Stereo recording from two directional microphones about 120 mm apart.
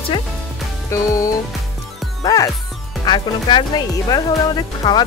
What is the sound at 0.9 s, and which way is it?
Speech, 25° left (ahead or behind).